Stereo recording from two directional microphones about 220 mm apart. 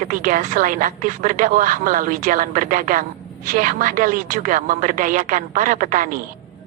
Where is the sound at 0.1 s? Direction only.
40° right (ahead or behind).